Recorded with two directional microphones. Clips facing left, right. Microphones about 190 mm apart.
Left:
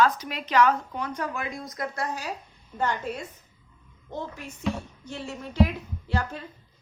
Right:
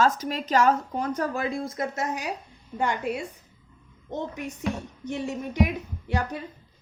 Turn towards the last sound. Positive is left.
turn(degrees=-15)  # may be behind; listen again after turning